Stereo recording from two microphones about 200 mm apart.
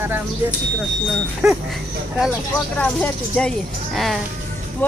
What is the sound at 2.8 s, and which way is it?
Speech, 5° left (ahead or behind).